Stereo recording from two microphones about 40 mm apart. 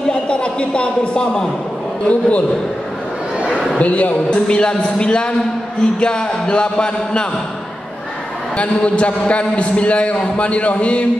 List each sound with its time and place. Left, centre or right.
0.1 s a man's voice: left
3.8 s a man's voice: left
4.5 s music: left
8.5 s a man's voice: left